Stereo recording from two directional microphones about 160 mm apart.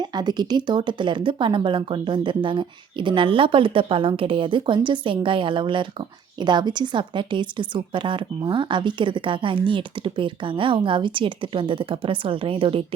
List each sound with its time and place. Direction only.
0.0 s a woman's voice: 25° right (ahead or behind)